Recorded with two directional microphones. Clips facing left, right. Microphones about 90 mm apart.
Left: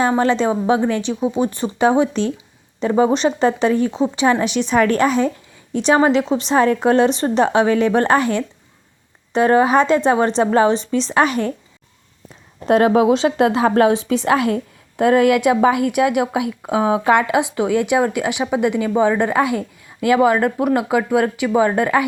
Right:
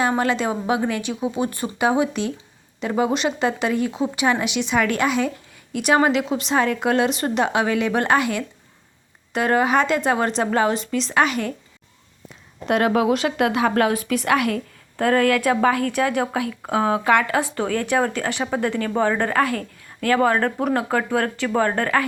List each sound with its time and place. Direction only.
0.2 s speech: 30° left (ahead or behind)
12.6 s a woman's voice: 30° left (ahead or behind); by 22.0 s 10° left (ahead or behind)